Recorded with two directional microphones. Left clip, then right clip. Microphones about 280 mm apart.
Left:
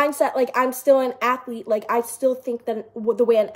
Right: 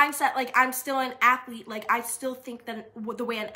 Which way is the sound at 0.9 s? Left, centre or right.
Right.